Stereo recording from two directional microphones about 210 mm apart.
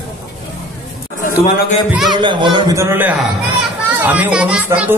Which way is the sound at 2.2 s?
20° right (ahead or behind).